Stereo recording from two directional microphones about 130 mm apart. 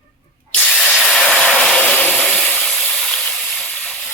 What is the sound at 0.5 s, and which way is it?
Spray, 5° left (ahead or behind).